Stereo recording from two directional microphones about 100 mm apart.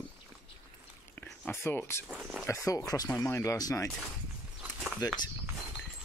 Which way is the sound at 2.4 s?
35° left (ahead or behind).